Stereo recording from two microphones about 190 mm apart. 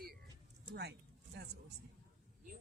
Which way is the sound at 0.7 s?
60° right (ahead or behind).